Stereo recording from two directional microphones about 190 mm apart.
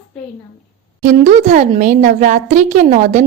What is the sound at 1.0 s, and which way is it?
A woman's voice, 40° right (ahead or behind).